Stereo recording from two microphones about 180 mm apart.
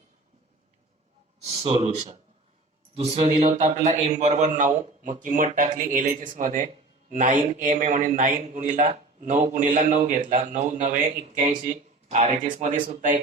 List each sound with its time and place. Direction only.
1.6 s a man's voice: 35° right (ahead or behind)